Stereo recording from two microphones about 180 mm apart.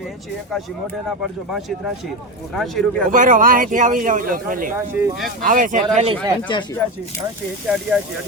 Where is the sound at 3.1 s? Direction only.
45° right (ahead or behind).